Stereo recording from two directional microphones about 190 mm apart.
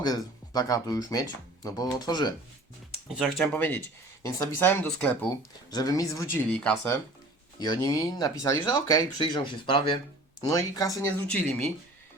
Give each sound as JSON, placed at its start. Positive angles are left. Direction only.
{"t": 0.0, "sound": "speech", "side_deg": 20}
{"t": 3.1, "sound": "speech", "side_deg": -5}
{"t": 3.4, "sound": "speech", "side_deg": 10}
{"t": 7.6, "sound": "speech", "side_deg": 20}
{"t": 11.3, "sound": "speech", "side_deg": 5}